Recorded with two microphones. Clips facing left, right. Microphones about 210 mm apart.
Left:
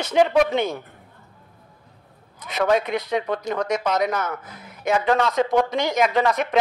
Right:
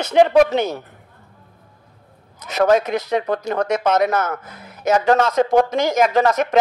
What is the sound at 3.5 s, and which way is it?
Speech, 55° right (ahead or behind).